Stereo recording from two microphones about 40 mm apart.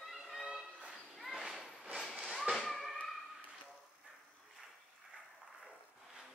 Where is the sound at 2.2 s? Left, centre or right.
Centre.